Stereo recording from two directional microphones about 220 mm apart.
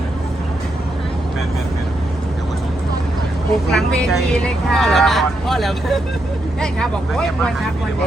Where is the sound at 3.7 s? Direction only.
Centre (ahead or behind).